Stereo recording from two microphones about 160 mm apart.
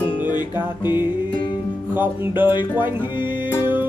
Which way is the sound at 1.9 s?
10° right (ahead or behind).